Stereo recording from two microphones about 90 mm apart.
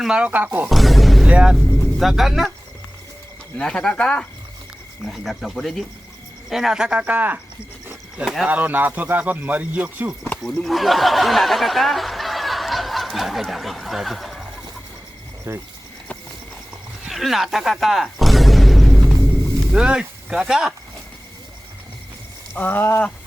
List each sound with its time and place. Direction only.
0.0 s speech: 10° right (ahead or behind)
0.7 s music: centre (ahead or behind)
1.3 s speech: 10° right (ahead or behind)
1.5 s speech: centre (ahead or behind)
3.6 s speech: 10° left (ahead or behind); by 7.3 s 15° right (ahead or behind)
8.2 s speech: 5° right (ahead or behind)
8.4 s speech: 20° right (ahead or behind)
10.4 s speech: centre (ahead or behind)
15.5 s speech: 25° right (ahead or behind)
17.1 s a sound: centre (ahead or behind)
22.5 s livestock: 20° left (ahead or behind)